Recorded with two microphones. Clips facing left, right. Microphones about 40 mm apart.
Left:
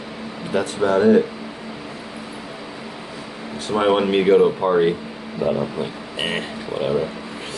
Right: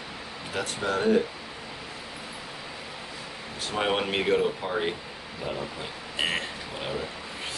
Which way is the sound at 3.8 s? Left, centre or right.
Centre.